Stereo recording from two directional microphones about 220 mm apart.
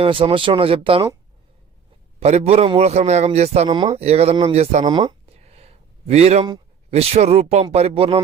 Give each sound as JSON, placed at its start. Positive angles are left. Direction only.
{"t": 0.0, "sound": "a man's voice", "side_deg": -25}
{"t": 2.1, "sound": "a man's voice", "side_deg": -30}
{"t": 4.9, "sound": "a sound", "side_deg": -20}
{"t": 6.9, "sound": "a man's voice", "side_deg": -30}